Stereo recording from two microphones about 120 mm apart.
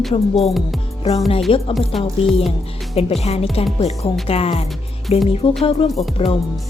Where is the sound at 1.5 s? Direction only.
50° left (ahead or behind).